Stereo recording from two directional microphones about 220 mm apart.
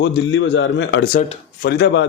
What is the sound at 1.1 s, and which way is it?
Speech, 35° left (ahead or behind).